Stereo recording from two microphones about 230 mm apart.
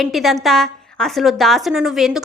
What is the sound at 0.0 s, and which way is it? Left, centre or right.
A woman's voice, centre.